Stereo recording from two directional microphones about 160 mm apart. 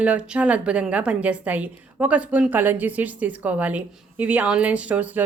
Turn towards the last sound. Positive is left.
turn(degrees=-10)  # may be behind; listen again after turning